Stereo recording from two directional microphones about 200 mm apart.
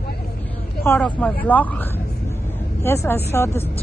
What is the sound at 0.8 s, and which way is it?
A woman's voice, 10° left (ahead or behind).